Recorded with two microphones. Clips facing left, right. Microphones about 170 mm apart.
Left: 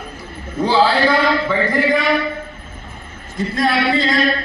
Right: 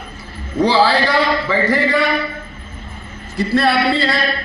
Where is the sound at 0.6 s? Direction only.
80° right.